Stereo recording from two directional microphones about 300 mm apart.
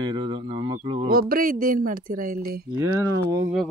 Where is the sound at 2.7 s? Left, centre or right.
Centre.